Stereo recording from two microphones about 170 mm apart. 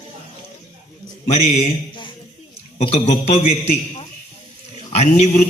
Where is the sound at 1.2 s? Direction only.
40° left (ahead or behind).